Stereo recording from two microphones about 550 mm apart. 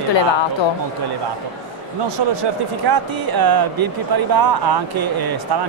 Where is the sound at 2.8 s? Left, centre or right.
Right.